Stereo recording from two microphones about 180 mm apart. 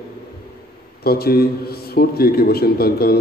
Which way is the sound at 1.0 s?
60° left (ahead or behind).